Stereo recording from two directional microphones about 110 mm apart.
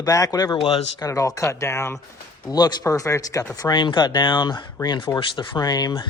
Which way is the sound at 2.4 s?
40° left (ahead or behind).